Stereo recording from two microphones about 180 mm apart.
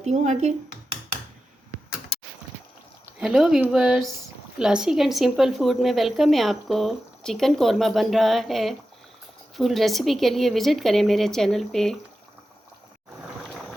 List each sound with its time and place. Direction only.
0.0 s speech: 40° right (ahead or behind)
3.2 s speech: 5° right (ahead or behind)